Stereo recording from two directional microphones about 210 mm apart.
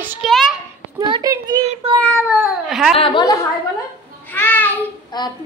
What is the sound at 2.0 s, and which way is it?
Cat, centre (ahead or behind).